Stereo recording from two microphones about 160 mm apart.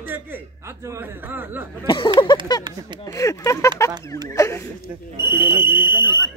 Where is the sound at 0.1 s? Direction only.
15° right (ahead or behind).